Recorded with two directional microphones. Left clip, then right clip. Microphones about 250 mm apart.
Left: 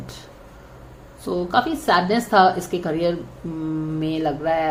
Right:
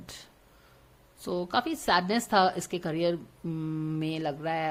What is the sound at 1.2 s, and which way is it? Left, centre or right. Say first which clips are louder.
Speech: left 9 dB; right.